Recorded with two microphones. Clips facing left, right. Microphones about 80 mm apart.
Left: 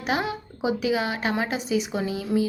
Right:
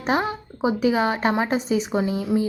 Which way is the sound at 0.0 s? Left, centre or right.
Right.